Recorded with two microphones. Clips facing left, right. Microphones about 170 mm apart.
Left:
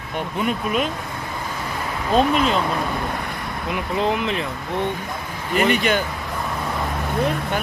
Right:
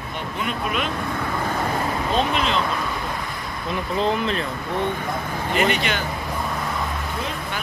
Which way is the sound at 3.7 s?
15° left (ahead or behind).